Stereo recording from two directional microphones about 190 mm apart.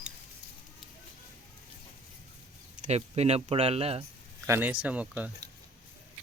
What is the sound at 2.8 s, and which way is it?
Speech, 35° right (ahead or behind).